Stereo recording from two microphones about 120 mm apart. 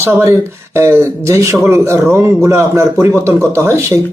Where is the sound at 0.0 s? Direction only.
20° right (ahead or behind).